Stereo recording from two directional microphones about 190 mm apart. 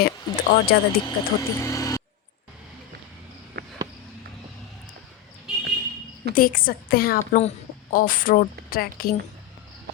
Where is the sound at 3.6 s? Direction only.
55° right (ahead or behind).